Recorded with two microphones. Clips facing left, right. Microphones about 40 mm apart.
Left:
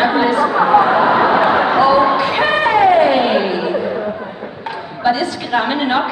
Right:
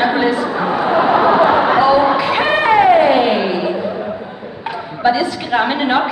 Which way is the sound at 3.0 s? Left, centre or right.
Centre.